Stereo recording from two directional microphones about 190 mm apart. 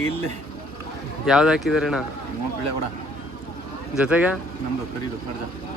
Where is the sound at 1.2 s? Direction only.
5° right (ahead or behind).